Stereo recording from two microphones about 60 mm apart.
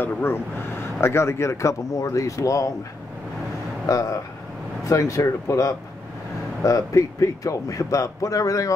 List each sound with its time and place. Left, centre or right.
0.0 s speech: left
3.8 s speech: left